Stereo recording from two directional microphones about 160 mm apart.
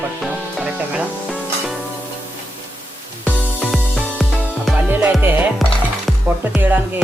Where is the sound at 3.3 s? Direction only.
5° left (ahead or behind).